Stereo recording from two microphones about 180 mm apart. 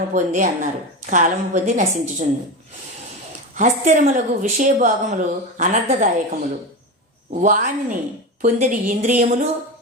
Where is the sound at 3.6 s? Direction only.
45° right (ahead or behind).